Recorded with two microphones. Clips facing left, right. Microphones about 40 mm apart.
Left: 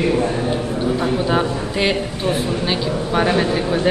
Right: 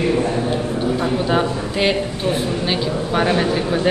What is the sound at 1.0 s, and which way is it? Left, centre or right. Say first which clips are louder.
A woman's voice: even; centre.